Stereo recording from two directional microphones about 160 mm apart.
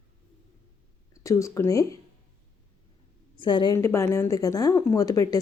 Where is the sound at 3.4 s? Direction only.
30° left (ahead or behind).